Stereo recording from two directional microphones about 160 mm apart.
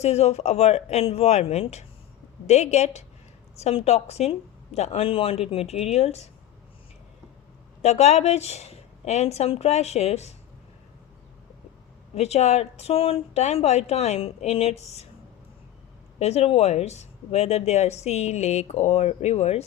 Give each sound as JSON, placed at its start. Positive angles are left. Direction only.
{"t": 0.0, "sound": "speech", "side_deg": 40}
{"t": 7.8, "sound": "speech", "side_deg": 45}
{"t": 12.1, "sound": "speech", "side_deg": 40}
{"t": 16.1, "sound": "speech", "side_deg": 40}